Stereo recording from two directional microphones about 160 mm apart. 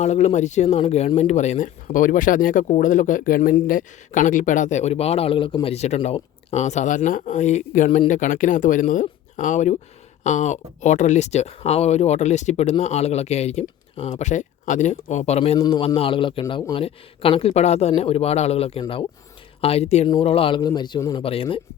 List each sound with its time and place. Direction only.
0.0 s a man's voice: 45° left (ahead or behind); by 21.2 s 25° left (ahead or behind)
21.2 s speech: 35° left (ahead or behind)